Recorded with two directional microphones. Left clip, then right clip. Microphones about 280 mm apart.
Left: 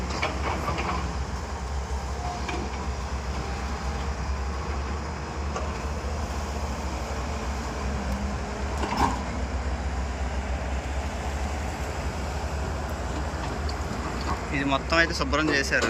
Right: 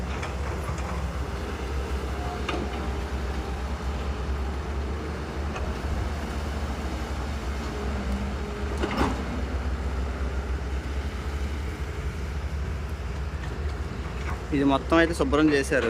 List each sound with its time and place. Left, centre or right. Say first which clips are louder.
14.5 s speech: right 2 dB; centre